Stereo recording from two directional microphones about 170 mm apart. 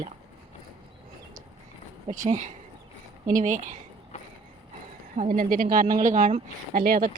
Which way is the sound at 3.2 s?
50° right (ahead or behind).